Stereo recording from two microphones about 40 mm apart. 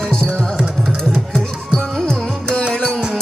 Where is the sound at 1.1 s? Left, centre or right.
Centre.